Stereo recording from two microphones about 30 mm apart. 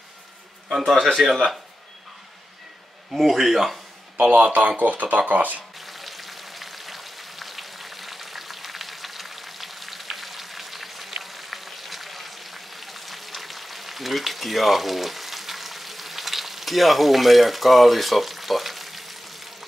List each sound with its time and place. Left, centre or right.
0.7 s speech: centre
3.1 s speech: centre
4.2 s speech: right
5.8 s frying: centre